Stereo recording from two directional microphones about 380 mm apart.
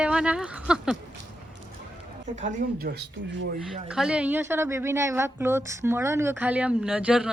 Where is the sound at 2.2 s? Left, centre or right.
Centre.